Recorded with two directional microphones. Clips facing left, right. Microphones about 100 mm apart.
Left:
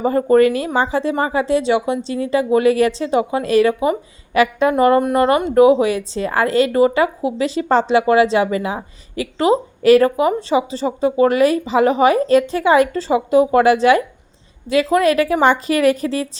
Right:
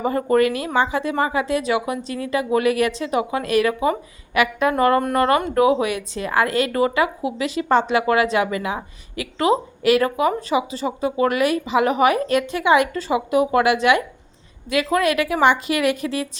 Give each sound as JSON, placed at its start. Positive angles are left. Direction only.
{"t": 0.0, "sound": "a woman's voice", "side_deg": 30}